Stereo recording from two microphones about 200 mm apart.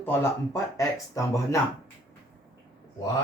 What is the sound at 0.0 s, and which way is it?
Speech, 10° left (ahead or behind).